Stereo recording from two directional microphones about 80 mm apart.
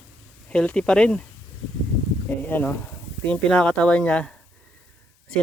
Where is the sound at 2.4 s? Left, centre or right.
Left.